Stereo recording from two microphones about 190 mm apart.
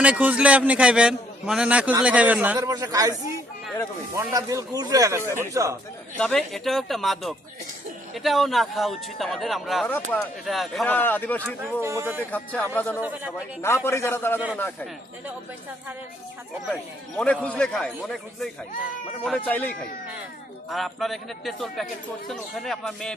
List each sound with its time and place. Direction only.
0.0 s a man's voice: 5° right (ahead or behind)
2.6 s a man's voice: 20° right (ahead or behind)
4.2 s a man's voice: 20° right (ahead or behind)
6.1 s speech: 5° left (ahead or behind)
11.8 s a man's voice: 15° right (ahead or behind)
12.3 s speech: 10° left (ahead or behind)
13.0 s a man's voice: 10° right (ahead or behind)
13.6 s speech: 15° left (ahead or behind)
17.2 s speech: 5° left (ahead or behind)